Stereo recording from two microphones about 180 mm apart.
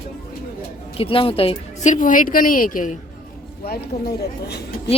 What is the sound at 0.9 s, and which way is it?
Speech, 30° left (ahead or behind).